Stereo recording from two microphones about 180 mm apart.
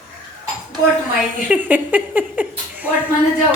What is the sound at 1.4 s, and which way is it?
Speech, 10° right (ahead or behind).